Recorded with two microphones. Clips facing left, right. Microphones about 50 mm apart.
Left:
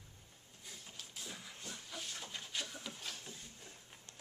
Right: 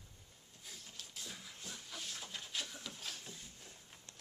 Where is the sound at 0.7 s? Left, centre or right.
Centre.